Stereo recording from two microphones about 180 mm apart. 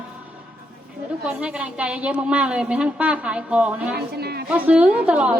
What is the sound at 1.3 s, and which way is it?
A woman's voice, 5° right (ahead or behind).